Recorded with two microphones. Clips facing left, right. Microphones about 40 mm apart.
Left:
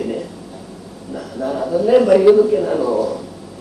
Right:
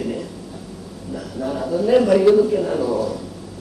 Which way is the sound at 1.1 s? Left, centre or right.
Centre.